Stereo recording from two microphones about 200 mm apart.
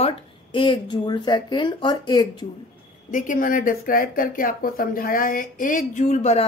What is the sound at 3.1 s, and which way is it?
Speech, 40° left (ahead or behind).